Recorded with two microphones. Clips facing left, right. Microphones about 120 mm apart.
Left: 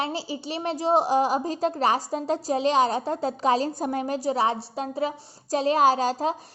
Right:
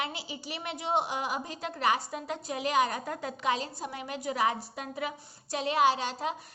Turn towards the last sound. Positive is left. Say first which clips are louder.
# left 7 dB
turn(degrees=35)  # may be behind; listen again after turning